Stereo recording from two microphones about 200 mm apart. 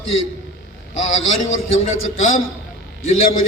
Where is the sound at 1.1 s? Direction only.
75° left (ahead or behind).